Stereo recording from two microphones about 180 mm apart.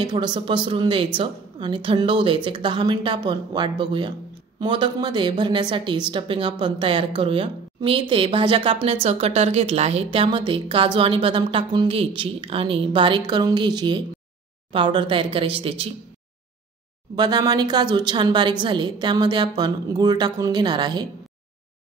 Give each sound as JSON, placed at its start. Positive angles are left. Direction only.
{"t": 0.0, "sound": "a woman's voice", "side_deg": -25}
{"t": 17.1, "sound": "a woman's voice", "side_deg": -25}